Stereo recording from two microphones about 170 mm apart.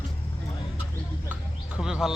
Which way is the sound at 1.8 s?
5° right (ahead or behind).